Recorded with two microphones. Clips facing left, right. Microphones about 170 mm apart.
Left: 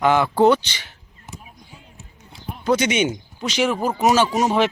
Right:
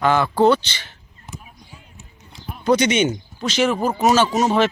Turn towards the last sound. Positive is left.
turn(degrees=15)  # may be behind; listen again after turning